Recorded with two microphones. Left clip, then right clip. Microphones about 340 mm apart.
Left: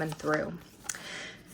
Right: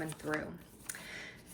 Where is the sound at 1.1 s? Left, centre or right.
Centre.